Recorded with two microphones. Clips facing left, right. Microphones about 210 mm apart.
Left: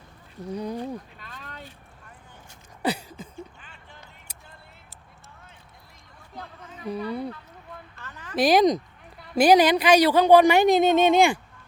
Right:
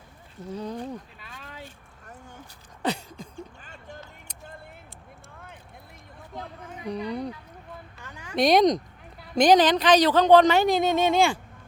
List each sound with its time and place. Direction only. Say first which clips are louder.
0.5 s speech: left 2 dB; 10° left (ahead or behind)
1.6 s vehicle: right 1 dB; 45° right (ahead or behind)
2.8 s a sound: left 1 dB; 5° left (ahead or behind)
3.3 s music: even; 40° right (ahead or behind)
6.9 s speech: left 1 dB; 5° left (ahead or behind)
7.9 s a sound: left 1 dB; 15° right (ahead or behind)
8.4 s speech: even; 5° left (ahead or behind); by 11.3 s 20° left (ahead or behind)